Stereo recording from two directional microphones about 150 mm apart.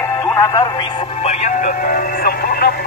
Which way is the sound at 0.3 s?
20° left (ahead or behind).